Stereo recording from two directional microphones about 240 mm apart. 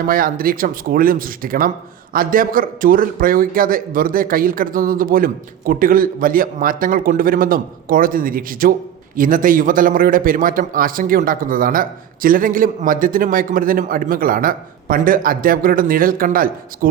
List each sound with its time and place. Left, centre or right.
0.1 s a man's voice: right